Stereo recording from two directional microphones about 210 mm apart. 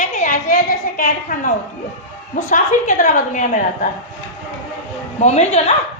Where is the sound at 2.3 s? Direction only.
35° left (ahead or behind).